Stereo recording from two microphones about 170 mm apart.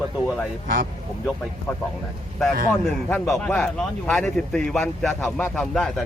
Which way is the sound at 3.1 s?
5° left (ahead or behind).